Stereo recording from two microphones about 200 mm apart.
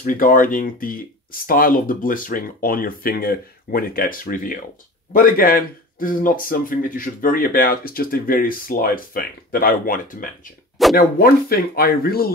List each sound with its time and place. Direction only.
0.0 s speech: 40° left (ahead or behind)